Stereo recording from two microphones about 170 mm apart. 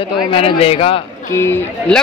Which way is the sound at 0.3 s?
35° left (ahead or behind).